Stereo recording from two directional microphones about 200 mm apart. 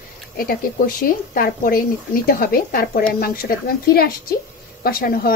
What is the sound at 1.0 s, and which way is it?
Speech, 45° left (ahead or behind).